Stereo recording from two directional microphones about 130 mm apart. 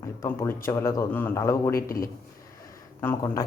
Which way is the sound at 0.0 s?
20° left (ahead or behind).